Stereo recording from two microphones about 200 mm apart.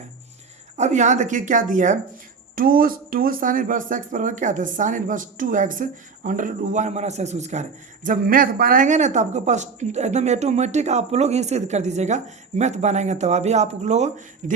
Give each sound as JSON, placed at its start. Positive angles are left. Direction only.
{"t": 0.8, "sound": "speech", "side_deg": -35}